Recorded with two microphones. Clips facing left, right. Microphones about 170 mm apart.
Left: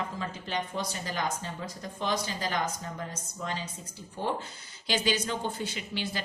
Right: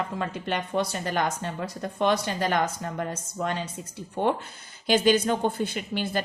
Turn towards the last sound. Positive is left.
turn(degrees=-50)  # may be behind; listen again after turning